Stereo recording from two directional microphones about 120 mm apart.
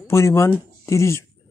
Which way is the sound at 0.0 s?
20° left (ahead or behind).